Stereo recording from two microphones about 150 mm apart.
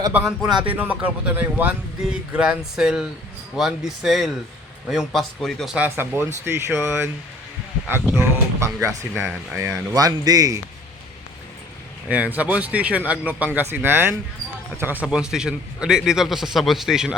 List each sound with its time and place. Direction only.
0.1 s a man's voice: 5° right (ahead or behind)
8.1 s speech: 20° right (ahead or behind)
12.0 s a man's voice: 10° right (ahead or behind)